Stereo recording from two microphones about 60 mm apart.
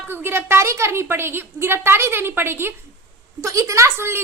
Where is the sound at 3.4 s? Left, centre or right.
Right.